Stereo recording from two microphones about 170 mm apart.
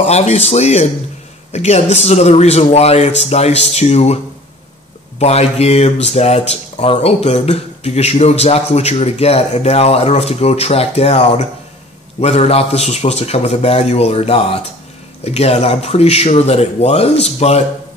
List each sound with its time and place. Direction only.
0.0 s speech: 40° left (ahead or behind)
5.2 s speech: 40° left (ahead or behind)